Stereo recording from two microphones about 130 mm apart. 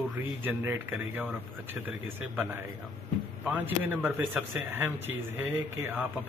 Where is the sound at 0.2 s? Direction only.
15° right (ahead or behind).